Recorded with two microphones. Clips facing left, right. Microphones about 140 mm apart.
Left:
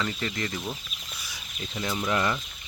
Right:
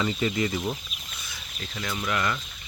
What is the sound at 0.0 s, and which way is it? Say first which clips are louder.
Speech: right 5 dB; 10° right (ahead or behind).